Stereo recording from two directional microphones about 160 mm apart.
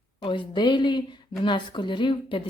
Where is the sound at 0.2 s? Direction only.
30° left (ahead or behind).